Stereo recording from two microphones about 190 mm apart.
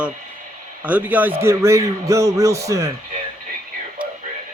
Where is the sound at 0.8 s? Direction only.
10° right (ahead or behind).